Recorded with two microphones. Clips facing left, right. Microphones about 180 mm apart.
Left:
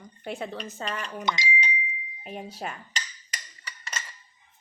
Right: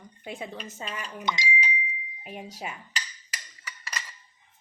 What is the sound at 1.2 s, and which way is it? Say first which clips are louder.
Speech: left 1 dB; 55° left (ahead or behind).